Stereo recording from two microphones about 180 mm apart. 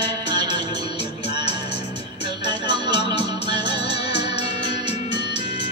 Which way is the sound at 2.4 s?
25° right (ahead or behind).